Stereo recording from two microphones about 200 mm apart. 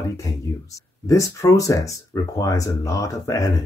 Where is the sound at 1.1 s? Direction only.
15° left (ahead or behind).